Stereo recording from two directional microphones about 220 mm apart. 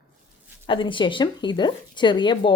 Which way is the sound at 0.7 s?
20° left (ahead or behind).